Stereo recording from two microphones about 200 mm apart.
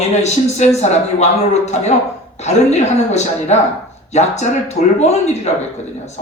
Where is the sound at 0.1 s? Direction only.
35° left (ahead or behind).